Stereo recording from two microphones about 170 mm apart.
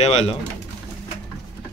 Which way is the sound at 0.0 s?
40° left (ahead or behind).